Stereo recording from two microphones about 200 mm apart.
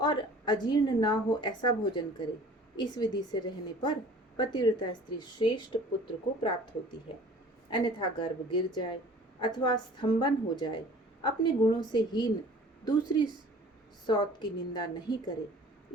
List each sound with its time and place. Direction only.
0.0 s a woman's voice: 20° left (ahead or behind)
7.7 s a woman's voice: 25° left (ahead or behind)